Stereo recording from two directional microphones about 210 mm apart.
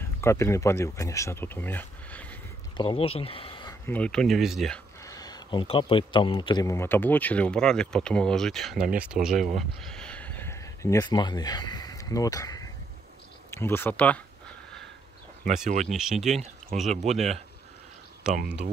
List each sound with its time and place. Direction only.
0.2 s speech: 15° left (ahead or behind)
2.8 s speech: 25° left (ahead or behind)
3.8 s speech: 5° left (ahead or behind)
5.0 s speech: 15° left (ahead or behind); by 9.3 s 5° right (ahead or behind)
9.3 s speech: 35° right (ahead or behind)
9.6 s a sound: 5° left (ahead or behind)
13.5 s speech: 10° left (ahead or behind)
15.4 s speech: 35° right (ahead or behind)
15.9 s speech: centre (ahead or behind)
16.3 s speech: 35° right (ahead or behind)